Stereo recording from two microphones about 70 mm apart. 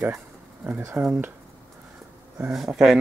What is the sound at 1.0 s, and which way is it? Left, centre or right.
Speech, right.